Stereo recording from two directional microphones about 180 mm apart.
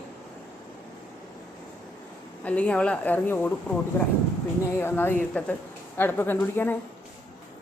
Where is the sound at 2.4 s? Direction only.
5° left (ahead or behind).